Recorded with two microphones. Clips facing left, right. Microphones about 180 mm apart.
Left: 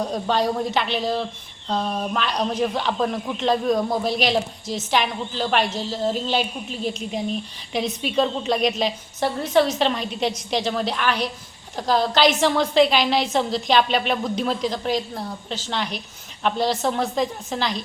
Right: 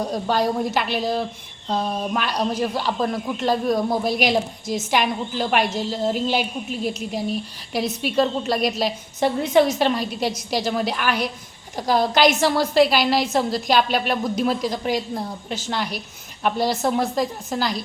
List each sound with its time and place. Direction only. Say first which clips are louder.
0.0 s a woman's voice: even; 5° right (ahead or behind)